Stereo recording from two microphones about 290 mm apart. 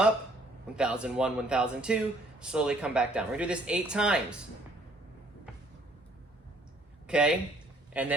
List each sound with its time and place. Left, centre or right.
0.8 s speech: centre
7.1 s speech: centre